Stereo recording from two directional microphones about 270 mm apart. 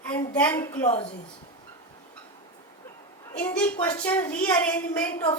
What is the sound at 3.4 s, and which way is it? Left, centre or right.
A woman's voice, centre.